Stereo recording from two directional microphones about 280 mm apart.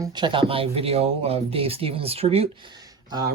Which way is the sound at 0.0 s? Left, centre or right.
Centre.